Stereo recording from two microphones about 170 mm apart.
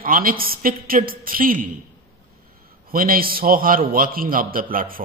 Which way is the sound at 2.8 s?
55° right (ahead or behind).